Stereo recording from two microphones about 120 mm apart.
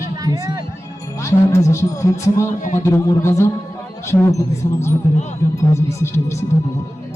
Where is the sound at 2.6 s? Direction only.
90° left.